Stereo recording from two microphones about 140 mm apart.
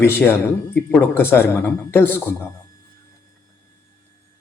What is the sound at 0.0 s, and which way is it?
A man's voice, 15° left (ahead or behind).